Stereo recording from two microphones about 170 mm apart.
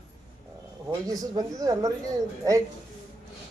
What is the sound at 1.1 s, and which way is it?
Speech, 20° right (ahead or behind).